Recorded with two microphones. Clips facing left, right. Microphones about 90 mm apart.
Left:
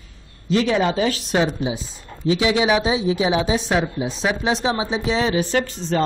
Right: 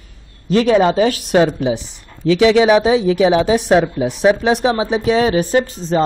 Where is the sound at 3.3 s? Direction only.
35° right (ahead or behind).